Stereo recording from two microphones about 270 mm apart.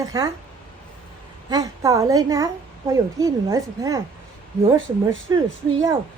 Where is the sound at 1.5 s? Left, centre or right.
Centre.